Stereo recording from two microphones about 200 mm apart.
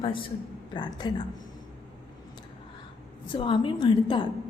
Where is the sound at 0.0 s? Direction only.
25° left (ahead or behind).